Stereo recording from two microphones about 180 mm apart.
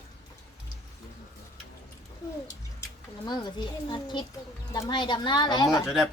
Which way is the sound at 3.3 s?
25° left (ahead or behind).